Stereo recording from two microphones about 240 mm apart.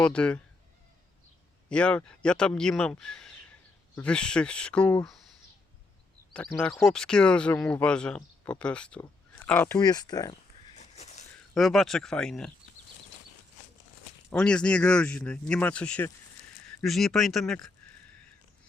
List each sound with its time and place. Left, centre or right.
0.0 s speech: centre
1.7 s speech: centre
6.3 s speech: centre
10.8 s a sound: left
11.5 s speech: centre
14.3 s speech: centre